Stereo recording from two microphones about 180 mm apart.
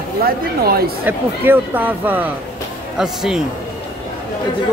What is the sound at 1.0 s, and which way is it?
Speech, 10° right (ahead or behind).